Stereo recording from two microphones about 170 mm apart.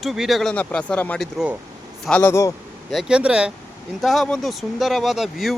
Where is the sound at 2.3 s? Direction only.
15° left (ahead or behind).